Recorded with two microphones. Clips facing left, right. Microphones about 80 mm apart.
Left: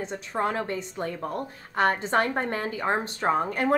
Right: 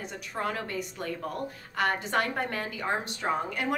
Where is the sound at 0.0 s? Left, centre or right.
Left.